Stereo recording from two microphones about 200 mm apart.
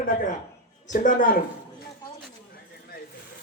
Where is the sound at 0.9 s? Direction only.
45° left (ahead or behind).